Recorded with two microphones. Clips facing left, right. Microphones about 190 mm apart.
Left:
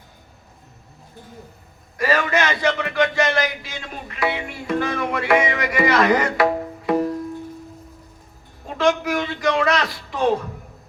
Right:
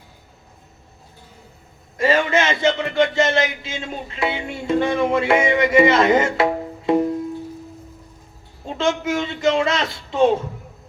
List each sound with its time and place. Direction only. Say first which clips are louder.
2.0 s speech: right 2 dB; 25° right (ahead or behind)
8.6 s speech: left 1 dB; 25° right (ahead or behind)